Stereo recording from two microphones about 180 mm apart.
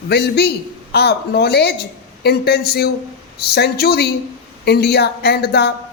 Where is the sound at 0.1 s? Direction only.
65° left (ahead or behind).